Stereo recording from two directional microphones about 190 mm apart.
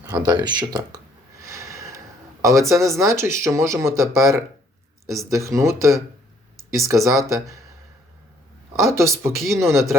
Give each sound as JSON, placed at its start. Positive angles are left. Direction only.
{"t": 0.0, "sound": "a sound", "side_deg": -20}
{"t": 2.6, "sound": "speech", "side_deg": -15}
{"t": 8.8, "sound": "speech", "side_deg": -15}
{"t": 9.3, "sound": "speech", "side_deg": 0}
{"t": 9.6, "sound": "speech", "side_deg": -15}